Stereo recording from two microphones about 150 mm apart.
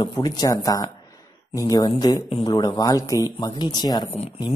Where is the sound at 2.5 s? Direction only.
25° left (ahead or behind).